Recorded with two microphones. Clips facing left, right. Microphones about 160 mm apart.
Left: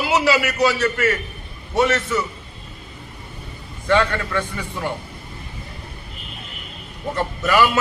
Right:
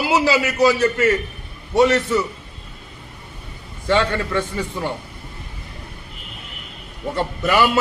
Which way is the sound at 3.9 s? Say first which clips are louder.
Even; 25° right (ahead or behind).